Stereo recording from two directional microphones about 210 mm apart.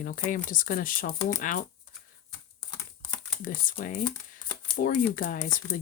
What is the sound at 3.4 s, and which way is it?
Speech, 40° left (ahead or behind).